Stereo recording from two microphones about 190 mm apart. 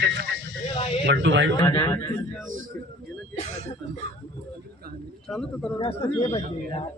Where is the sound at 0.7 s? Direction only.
30° left (ahead or behind).